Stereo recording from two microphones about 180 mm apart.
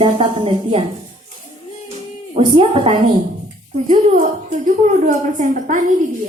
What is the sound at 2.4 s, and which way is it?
Speech, 30° right (ahead or behind).